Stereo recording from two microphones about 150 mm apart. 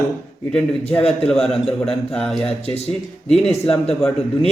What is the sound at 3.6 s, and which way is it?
Speech, 40° left (ahead or behind).